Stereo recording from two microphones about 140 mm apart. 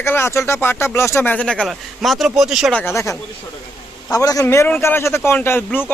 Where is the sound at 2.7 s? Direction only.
20° left (ahead or behind).